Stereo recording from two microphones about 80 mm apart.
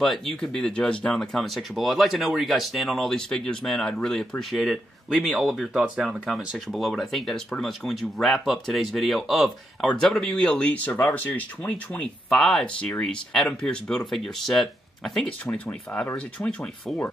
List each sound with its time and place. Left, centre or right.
0.0 s speech: centre
10.4 s speech: centre
15.5 s speech: centre
16.3 s speech: centre